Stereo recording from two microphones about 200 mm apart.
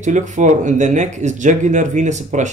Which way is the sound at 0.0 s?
35° right (ahead or behind).